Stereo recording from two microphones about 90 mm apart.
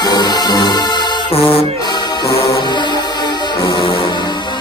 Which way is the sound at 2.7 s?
55° left (ahead or behind).